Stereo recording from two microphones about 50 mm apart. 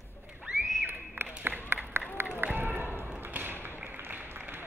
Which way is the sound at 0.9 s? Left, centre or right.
Right.